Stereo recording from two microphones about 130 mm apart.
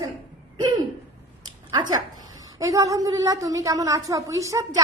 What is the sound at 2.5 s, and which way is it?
A woman's voice, 25° right (ahead or behind).